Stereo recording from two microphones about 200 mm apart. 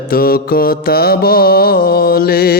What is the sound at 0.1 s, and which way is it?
Mantra, 50° left (ahead or behind).